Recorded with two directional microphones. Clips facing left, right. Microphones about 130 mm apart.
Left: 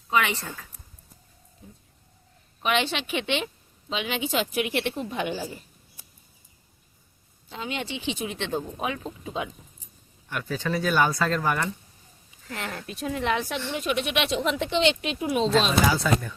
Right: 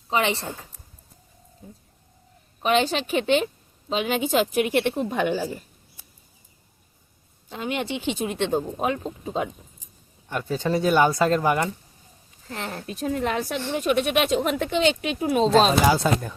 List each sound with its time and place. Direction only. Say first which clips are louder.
0.1 s speech: right 2 dB; 30° right (ahead or behind)
2.6 s a woman's voice: right 4 dB; 40° right (ahead or behind)
7.5 s a woman's voice: right 5 dB; 50° right (ahead or behind)
10.2 s speech: right 4 dB; 30° right (ahead or behind)
12.5 s a woman's voice: right 2 dB; 30° right (ahead or behind)